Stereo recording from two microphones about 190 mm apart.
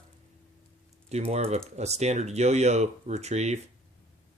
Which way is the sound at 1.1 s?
35° right (ahead or behind).